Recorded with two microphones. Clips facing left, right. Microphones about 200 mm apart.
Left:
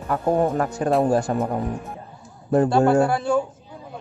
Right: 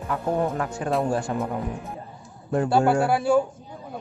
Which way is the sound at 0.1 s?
40° left (ahead or behind).